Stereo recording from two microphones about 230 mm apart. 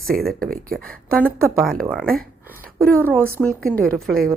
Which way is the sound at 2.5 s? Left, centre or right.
Right.